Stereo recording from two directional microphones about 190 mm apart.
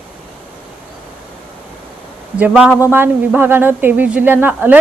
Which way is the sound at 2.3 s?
5° right (ahead or behind).